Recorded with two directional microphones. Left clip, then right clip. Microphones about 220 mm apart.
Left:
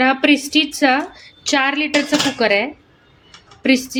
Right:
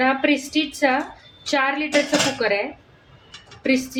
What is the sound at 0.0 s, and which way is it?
A woman's voice, 40° left (ahead or behind).